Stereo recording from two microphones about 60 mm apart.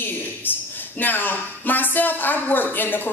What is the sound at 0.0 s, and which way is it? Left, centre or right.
Speech, left.